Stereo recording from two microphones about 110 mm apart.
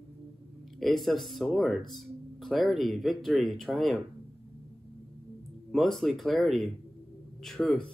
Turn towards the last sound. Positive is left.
turn(degrees=5)  # may be behind; listen again after turning